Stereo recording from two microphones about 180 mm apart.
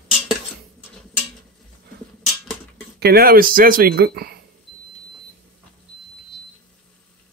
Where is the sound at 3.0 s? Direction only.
60° right (ahead or behind).